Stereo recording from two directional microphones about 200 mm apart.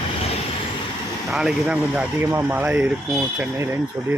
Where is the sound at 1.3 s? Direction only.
5° right (ahead or behind).